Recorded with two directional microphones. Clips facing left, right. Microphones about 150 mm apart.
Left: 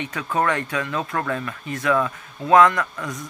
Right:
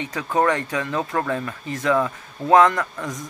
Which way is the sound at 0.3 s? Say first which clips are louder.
Right 2 dB; 20° right (ahead or behind).